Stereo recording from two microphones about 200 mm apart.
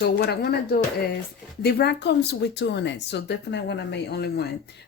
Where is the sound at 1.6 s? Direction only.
55° left (ahead or behind).